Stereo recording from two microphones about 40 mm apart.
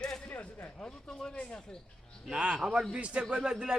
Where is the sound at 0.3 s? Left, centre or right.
Left.